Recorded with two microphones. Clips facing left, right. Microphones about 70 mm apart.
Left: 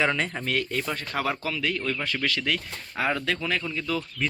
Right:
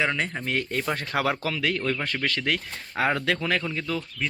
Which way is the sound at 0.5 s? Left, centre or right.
Right.